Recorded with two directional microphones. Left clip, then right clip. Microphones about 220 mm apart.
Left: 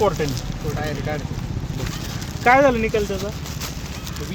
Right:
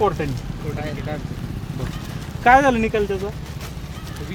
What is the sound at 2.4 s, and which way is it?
Speech, 40° right (ahead or behind).